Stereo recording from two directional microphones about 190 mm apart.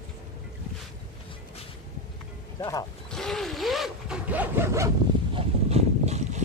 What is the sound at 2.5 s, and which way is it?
Roaring cats, 20° left (ahead or behind).